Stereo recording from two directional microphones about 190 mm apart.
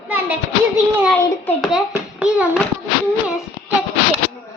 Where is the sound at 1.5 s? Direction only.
Centre (ahead or behind).